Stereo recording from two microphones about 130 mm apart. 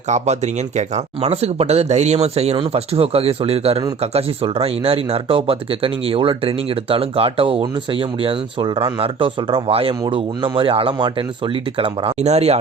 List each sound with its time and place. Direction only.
0.1 s speech: 65° right (ahead or behind); by 12.1 s 40° right (ahead or behind)
12.2 s speech: 55° right (ahead or behind)